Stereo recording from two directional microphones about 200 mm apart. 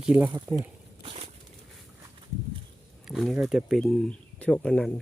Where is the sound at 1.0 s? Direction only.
30° right (ahead or behind).